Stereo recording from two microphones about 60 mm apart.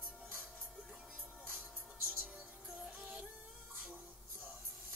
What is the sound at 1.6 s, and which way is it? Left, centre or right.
Music, right.